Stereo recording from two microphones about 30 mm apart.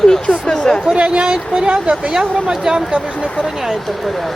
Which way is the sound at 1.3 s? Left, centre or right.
Right.